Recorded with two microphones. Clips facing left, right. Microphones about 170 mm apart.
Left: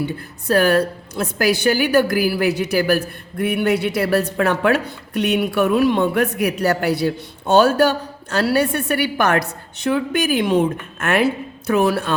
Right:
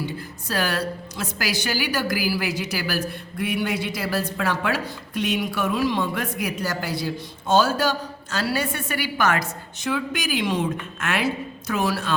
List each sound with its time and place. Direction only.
0.4 s a woman's voice: 55° left (ahead or behind)